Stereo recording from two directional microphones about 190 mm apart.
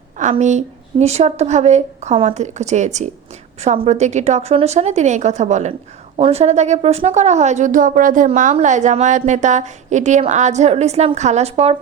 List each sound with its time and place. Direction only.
0.2 s a woman's voice: 40° right (ahead or behind)